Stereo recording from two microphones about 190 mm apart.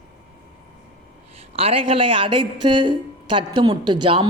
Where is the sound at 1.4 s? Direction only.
30° right (ahead or behind).